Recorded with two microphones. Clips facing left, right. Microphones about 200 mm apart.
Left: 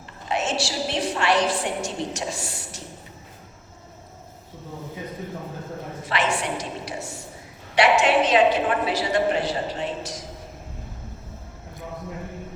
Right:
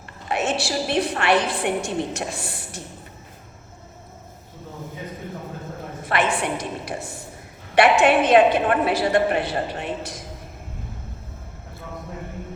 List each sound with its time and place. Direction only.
0.3 s a woman's voice: 60° right (ahead or behind)
6.1 s a sound: 55° right (ahead or behind)
7.8 s a woman's voice: 55° right (ahead or behind)